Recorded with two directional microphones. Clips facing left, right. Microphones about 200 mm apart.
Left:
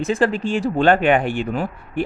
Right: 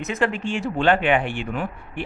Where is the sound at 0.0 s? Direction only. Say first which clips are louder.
Left 5 dB; 35° left (ahead or behind).